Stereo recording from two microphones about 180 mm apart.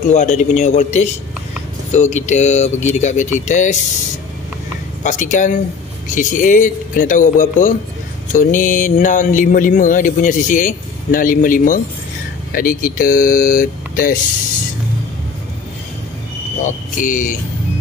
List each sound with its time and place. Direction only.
0.1 s speech: 40° left (ahead or behind)
5.0 s speech: 45° left (ahead or behind)
16.6 s speech: 45° left (ahead or behind)